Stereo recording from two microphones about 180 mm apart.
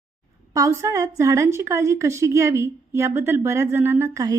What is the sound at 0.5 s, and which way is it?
A woman's voice, 15° right (ahead or behind).